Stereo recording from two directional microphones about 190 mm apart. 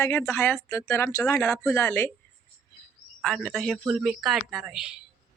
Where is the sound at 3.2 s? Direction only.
5° left (ahead or behind).